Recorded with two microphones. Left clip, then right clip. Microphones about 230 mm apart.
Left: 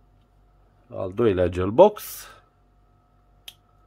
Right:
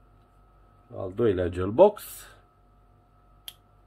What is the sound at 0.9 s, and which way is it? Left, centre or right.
Speech, left.